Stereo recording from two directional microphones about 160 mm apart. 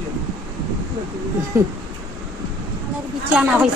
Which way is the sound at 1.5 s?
20° right (ahead or behind).